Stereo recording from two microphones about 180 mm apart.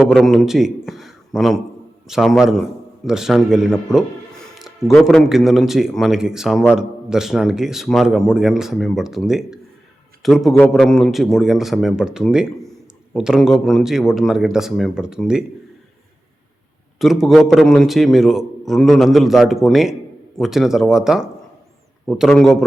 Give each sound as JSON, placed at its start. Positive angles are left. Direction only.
{"t": 0.0, "sound": "a man's voice", "side_deg": 0}
{"t": 17.0, "sound": "a man's voice", "side_deg": 0}